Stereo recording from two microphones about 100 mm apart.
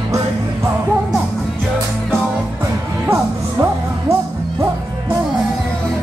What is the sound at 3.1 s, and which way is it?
Music, 25° right (ahead or behind).